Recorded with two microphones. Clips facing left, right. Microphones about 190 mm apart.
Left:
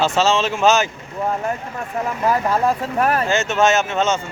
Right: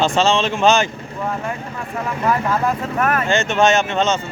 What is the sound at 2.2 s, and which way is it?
Speech, 35° left (ahead or behind).